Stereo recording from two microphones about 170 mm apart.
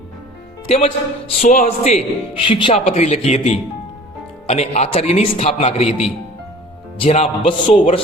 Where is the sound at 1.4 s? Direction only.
45° left (ahead or behind); by 2.8 s 30° left (ahead or behind).